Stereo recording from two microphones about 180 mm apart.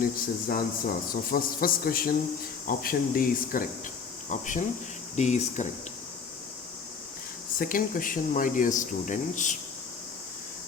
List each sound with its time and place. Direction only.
0.0 s speech: 55° left (ahead or behind)
7.6 s speech: 50° left (ahead or behind)